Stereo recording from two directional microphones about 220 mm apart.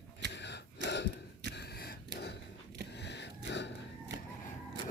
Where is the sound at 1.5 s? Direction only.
45° left (ahead or behind).